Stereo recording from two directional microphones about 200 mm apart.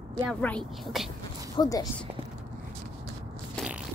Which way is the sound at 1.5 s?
20° left (ahead or behind).